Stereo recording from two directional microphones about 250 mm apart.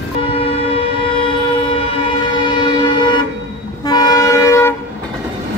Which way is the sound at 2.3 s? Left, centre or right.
Centre.